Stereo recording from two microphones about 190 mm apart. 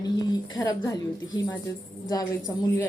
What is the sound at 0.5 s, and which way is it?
Speech, 20° left (ahead or behind).